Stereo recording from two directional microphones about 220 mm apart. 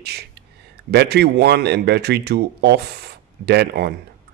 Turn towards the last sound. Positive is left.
turn(degrees=-50)  # may be behind; listen again after turning